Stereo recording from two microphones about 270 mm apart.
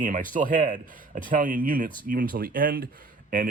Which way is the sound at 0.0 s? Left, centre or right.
Right.